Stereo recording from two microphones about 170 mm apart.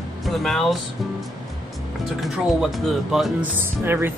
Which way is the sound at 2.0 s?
Centre (ahead or behind).